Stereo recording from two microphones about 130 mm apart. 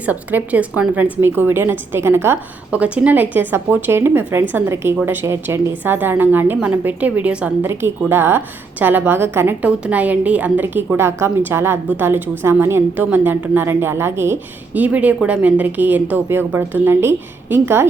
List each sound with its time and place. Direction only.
0.0 s a woman's voice: 15° right (ahead or behind)